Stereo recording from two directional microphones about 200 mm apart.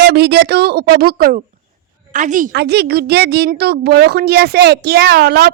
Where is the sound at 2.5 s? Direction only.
55° right (ahead or behind).